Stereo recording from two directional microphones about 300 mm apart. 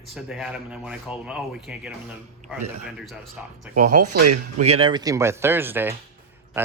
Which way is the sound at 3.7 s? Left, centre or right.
Right.